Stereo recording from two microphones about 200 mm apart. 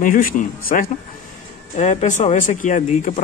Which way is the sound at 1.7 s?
35° left (ahead or behind).